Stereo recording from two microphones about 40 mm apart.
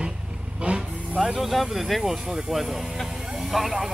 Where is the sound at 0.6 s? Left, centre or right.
Right.